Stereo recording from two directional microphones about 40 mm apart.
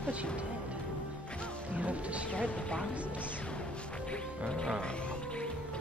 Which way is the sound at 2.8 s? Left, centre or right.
Right.